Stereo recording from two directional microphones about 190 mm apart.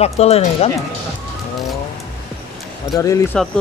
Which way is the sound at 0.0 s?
35° left (ahead or behind).